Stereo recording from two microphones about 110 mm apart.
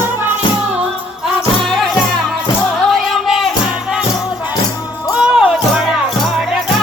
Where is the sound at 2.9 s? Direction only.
Centre (ahead or behind).